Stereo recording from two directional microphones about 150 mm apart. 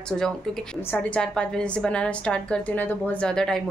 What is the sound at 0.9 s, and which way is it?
A woman's voice, 5° left (ahead or behind).